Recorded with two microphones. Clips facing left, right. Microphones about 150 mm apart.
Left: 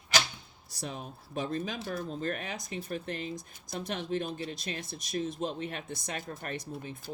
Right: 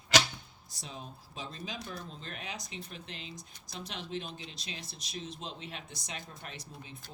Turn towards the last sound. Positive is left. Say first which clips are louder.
# left 9 dB
turn(degrees=55)  # may be behind; listen again after turning